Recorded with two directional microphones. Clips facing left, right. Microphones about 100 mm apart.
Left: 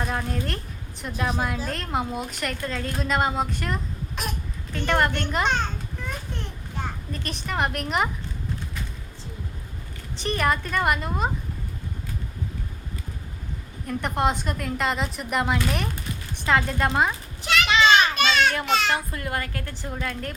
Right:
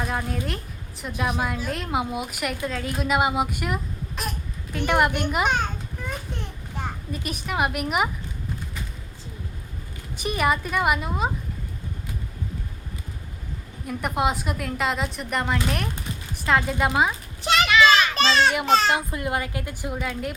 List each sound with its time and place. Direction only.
0.0 s a woman's voice: centre (ahead or behind)
7.1 s a woman's voice: 10° right (ahead or behind)
10.2 s a woman's voice: 10° right (ahead or behind)
13.8 s a woman's voice: 5° right (ahead or behind)
17.7 s children playing: 30° left (ahead or behind)
18.1 s children playing: 30° right (ahead or behind)
18.6 s a child's voice: 35° right (ahead or behind)
18.9 s a woman's voice: 20° right (ahead or behind)